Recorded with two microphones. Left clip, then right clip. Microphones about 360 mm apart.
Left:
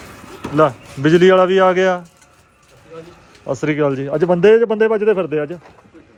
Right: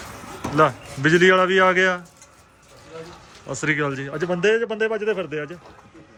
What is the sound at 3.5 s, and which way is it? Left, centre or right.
Speech, centre.